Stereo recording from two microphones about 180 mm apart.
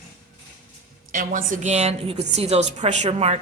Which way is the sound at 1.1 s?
50° right (ahead or behind).